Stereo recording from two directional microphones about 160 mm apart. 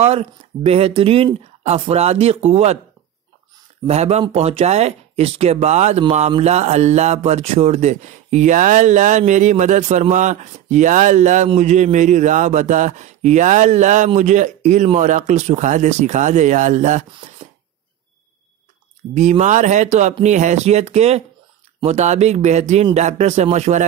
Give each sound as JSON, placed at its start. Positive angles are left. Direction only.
{"t": 0.0, "sound": "speech", "side_deg": -40}
{"t": 3.8, "sound": "speech", "side_deg": -40}
{"t": 19.1, "sound": "speech", "side_deg": -45}